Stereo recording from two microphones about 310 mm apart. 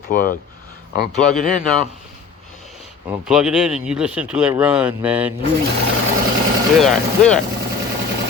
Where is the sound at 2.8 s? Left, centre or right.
Centre.